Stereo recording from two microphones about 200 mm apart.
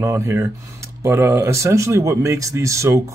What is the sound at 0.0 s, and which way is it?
Speech, 15° right (ahead or behind).